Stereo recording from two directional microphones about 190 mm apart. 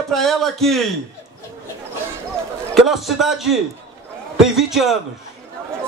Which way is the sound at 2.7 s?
Centre (ahead or behind).